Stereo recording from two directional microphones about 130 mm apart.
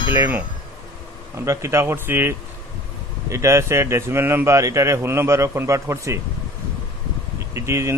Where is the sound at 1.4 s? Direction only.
20° right (ahead or behind).